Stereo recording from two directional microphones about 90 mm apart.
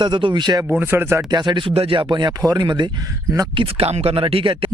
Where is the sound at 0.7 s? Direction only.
20° right (ahead or behind).